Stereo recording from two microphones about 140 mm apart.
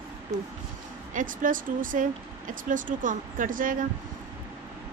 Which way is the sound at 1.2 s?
70° right (ahead or behind).